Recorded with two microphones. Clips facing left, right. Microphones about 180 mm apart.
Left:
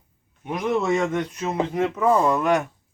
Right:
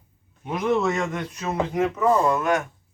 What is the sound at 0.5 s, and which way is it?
Speech, 15° left (ahead or behind).